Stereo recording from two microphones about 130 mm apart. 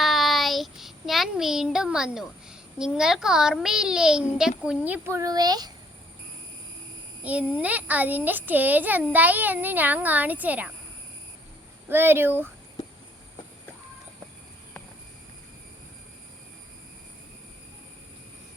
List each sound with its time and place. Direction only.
0.0 s child singing: centre (ahead or behind)
5.1 s a child's voice: 30° right (ahead or behind)
7.2 s a child's voice: 10° right (ahead or behind)
11.9 s a child's voice: 15° right (ahead or behind)